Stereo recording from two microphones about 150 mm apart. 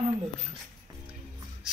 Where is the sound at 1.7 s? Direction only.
5° right (ahead or behind).